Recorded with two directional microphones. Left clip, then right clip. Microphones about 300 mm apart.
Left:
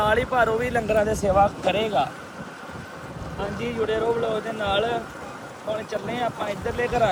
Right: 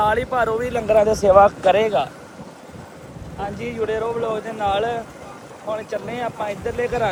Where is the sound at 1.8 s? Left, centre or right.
Centre.